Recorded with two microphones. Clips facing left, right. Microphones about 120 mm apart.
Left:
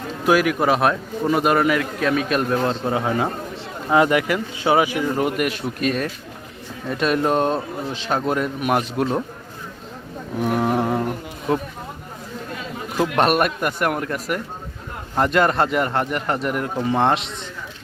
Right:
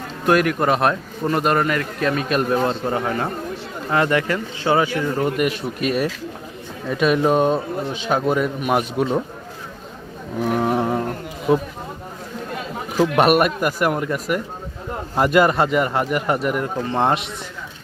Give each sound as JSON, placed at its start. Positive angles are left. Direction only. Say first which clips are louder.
{"t": 0.3, "sound": "speech", "louder": "even", "side_deg": 5}
{"t": 2.9, "sound": "speech", "louder": "left 1 dB", "side_deg": 5}
{"t": 5.4, "sound": "speech", "louder": "right 1 dB", "side_deg": 0}
{"t": 10.4, "sound": "speech", "louder": "even", "side_deg": 0}
{"t": 13.0, "sound": "speech", "louder": "right 3 dB", "side_deg": -5}